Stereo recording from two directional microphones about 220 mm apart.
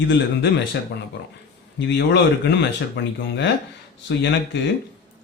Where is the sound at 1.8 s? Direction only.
55° left (ahead or behind).